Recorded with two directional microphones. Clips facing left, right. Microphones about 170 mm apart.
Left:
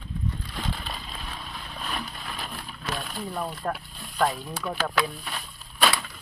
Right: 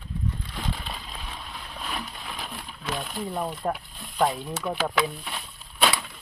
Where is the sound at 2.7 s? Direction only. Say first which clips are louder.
Right 2 dB; 15° right (ahead or behind).